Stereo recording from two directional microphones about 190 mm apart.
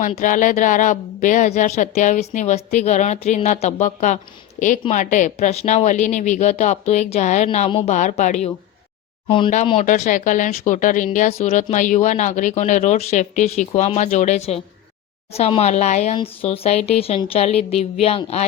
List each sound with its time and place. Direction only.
0.1 s speech: 40° left (ahead or behind)
9.2 s speech: 25° left (ahead or behind)
9.8 s speech: 40° left (ahead or behind)